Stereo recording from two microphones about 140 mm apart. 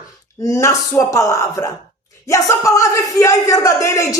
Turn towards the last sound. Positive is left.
turn(degrees=20)  # may be behind; listen again after turning